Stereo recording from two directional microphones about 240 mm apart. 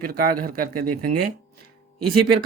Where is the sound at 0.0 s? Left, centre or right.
Right.